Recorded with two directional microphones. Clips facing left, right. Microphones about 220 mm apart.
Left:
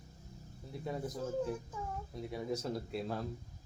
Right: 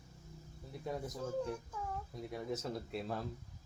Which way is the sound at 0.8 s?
Centre (ahead or behind).